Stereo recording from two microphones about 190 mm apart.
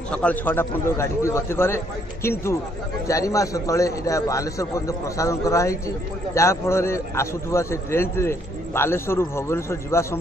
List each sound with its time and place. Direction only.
0.1 s a man's voice: 5° left (ahead or behind)